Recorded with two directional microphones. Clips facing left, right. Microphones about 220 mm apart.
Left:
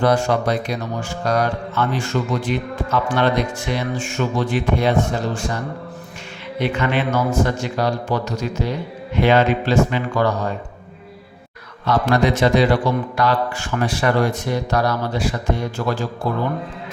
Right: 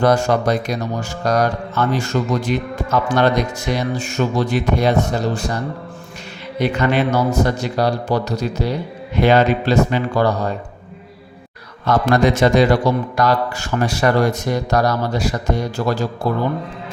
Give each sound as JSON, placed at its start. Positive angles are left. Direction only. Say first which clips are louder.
{"t": 0.0, "sound": "a man's voice", "louder": "right 2 dB", "side_deg": -45}
{"t": 6.6, "sound": "a man's voice", "louder": "right 3 dB", "side_deg": -40}
{"t": 11.9, "sound": "a man's voice", "louder": "right 2 dB", "side_deg": -45}